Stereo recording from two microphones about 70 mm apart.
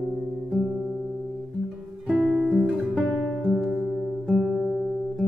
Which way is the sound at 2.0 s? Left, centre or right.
Centre.